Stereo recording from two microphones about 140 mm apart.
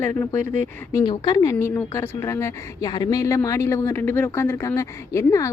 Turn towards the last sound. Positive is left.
turn(degrees=20)  # may be behind; listen again after turning